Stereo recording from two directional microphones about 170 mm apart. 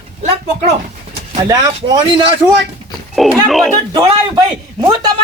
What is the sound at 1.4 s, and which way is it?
Speech, 25° right (ahead or behind).